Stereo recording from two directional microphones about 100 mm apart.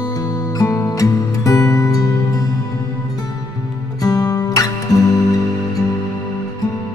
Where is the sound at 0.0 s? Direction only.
40° left (ahead or behind).